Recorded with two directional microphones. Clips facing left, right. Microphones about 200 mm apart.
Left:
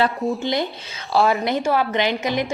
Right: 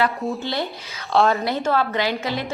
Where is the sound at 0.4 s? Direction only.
15° left (ahead or behind).